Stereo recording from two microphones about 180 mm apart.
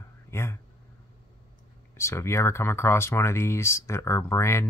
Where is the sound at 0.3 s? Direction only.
15° left (ahead or behind).